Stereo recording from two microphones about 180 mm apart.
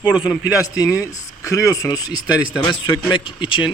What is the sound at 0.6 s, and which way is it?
A man's voice, 20° left (ahead or behind).